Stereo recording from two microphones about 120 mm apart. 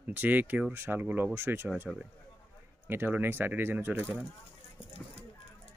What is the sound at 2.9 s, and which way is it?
Speech, 15° right (ahead or behind).